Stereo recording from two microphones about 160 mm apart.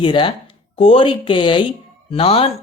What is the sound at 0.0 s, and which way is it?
Speech, 30° left (ahead or behind).